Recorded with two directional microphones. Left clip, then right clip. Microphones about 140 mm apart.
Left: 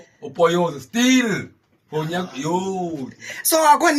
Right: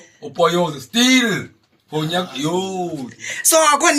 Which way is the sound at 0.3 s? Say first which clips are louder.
Right 1 dB; 10° left (ahead or behind).